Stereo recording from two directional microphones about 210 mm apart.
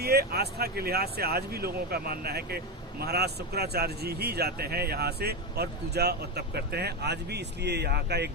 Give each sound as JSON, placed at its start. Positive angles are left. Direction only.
{"t": 0.0, "sound": "speech", "side_deg": -50}